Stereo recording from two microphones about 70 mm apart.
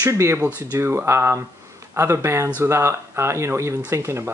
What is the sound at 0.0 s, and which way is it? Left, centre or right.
Speech, right.